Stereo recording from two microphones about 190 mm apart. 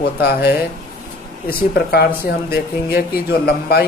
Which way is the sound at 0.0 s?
55° left (ahead or behind).